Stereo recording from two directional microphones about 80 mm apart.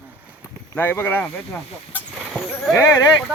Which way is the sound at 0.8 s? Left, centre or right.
Left.